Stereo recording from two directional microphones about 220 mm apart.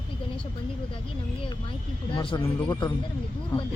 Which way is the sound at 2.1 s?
20° left (ahead or behind).